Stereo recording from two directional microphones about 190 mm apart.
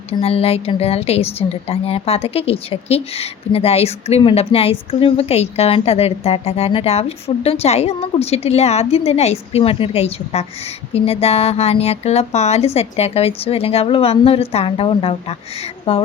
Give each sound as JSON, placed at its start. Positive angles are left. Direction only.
{"t": 0.1, "sound": "a woman's voice", "side_deg": 30}